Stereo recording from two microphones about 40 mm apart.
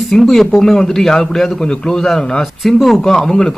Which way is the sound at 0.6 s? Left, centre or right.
Centre.